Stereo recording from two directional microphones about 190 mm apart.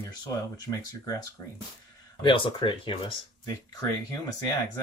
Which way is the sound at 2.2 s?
25° left (ahead or behind).